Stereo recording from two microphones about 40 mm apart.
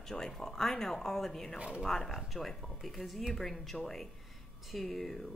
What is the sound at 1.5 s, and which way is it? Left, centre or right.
Speech, right.